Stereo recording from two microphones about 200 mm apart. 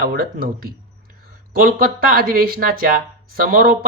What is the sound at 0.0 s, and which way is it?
Speech, 45° right (ahead or behind).